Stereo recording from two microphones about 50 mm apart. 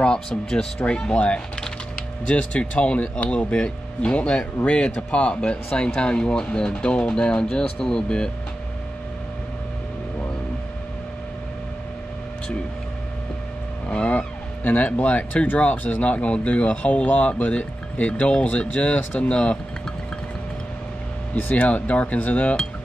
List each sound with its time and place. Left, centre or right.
0.0 s speech: centre
13.8 s vehicle: left
14.6 s speech: left
21.5 s speech: left